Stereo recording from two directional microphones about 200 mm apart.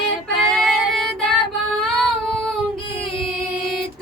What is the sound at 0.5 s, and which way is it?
Child singing, centre (ahead or behind).